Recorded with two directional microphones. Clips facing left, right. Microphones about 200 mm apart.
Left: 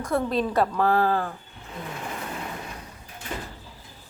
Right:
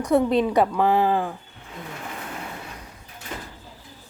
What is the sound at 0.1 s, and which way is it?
Speech, 20° right (ahead or behind).